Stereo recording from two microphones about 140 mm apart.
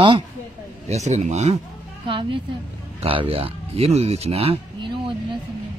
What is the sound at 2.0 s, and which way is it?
Speech, 40° right (ahead or behind).